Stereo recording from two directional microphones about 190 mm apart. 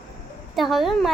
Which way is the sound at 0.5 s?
Centre (ahead or behind).